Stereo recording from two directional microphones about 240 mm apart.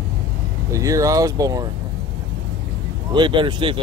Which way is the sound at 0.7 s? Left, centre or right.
Centre.